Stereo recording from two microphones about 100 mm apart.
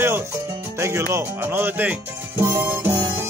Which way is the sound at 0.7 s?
30° right (ahead or behind).